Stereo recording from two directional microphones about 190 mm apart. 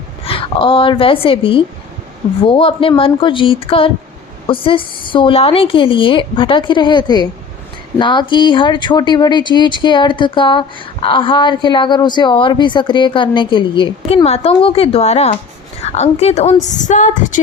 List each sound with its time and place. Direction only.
0.3 s a woman's voice: 30° left (ahead or behind)